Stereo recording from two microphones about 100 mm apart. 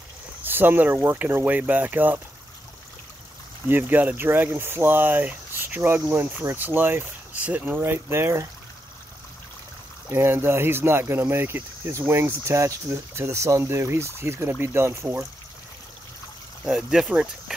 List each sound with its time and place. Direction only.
0.5 s speech: 20° right (ahead or behind)
3.6 s speech: 20° right (ahead or behind)
10.1 s speech: 25° right (ahead or behind)
16.7 s speech: 5° right (ahead or behind)